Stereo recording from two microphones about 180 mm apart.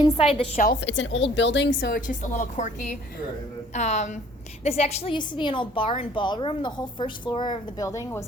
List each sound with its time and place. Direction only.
0.2 s a woman's voice: 35° left (ahead or behind)
0.7 s a woman's voice: 80° left; by 8.2 s 15° left (ahead or behind)